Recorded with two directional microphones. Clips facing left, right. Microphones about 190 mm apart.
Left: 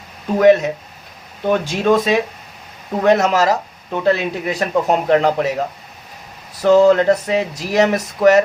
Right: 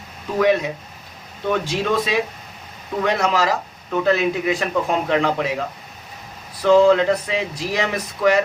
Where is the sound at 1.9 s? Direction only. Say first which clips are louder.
Left 5 dB; 45° left (ahead or behind).